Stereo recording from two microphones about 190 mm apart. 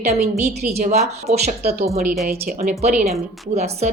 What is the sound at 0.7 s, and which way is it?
A woman's voice, 35° right (ahead or behind).